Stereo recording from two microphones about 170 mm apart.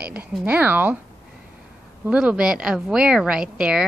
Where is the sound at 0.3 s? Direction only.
5° right (ahead or behind).